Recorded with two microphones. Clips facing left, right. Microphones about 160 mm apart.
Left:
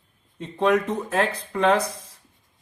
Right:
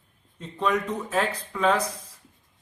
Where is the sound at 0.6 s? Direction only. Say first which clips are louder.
Left 5 dB; 65° left (ahead or behind).